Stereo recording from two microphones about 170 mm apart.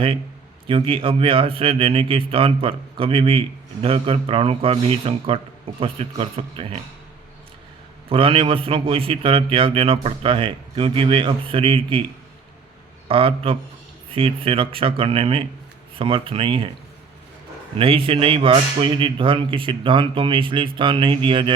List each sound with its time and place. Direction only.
0.7 s a man's voice: 30° right (ahead or behind)
8.1 s a man's voice: 30° right (ahead or behind)
13.1 s a man's voice: 30° right (ahead or behind)
17.7 s a man's voice: 30° right (ahead or behind)